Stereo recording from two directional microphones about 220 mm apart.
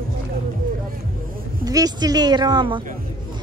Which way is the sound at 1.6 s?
15° right (ahead or behind).